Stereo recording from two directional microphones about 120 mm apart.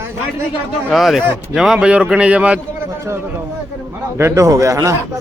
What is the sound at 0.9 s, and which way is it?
A man's voice, centre (ahead or behind).